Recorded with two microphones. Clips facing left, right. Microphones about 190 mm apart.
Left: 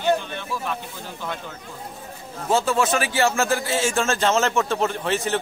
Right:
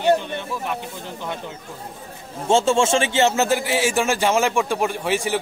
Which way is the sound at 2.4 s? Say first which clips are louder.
Right 3 dB; 25° right (ahead or behind).